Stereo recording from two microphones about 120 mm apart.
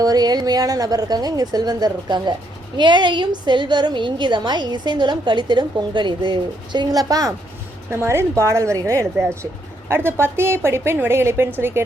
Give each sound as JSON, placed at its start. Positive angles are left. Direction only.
{"t": 0.0, "sound": "a woman's voice", "side_deg": -35}